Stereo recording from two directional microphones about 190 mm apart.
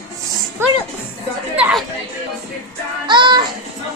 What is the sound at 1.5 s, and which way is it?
Chatter, 5° right (ahead or behind).